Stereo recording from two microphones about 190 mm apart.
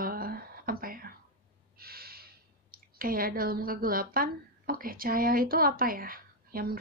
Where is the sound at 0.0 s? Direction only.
50° right (ahead or behind).